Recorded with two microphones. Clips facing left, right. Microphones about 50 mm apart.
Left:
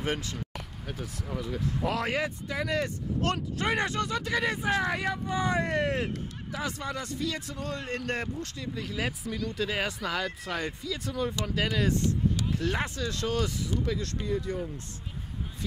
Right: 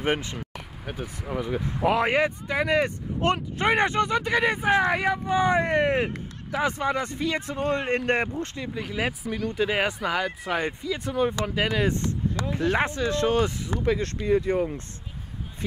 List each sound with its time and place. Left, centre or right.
0.0 s speech: right
5.2 s speech: right
10.6 s speech: right
11.4 s speech: right